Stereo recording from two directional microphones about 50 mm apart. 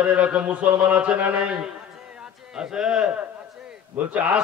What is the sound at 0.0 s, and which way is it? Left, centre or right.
A man's voice, right.